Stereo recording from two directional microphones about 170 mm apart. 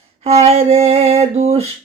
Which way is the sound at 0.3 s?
35° right (ahead or behind).